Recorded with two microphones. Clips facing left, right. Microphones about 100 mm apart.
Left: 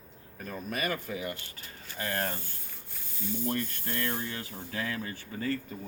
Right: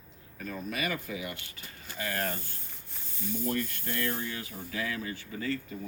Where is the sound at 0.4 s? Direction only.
40° left (ahead or behind).